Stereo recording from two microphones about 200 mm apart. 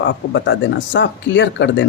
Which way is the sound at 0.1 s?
60° left (ahead or behind).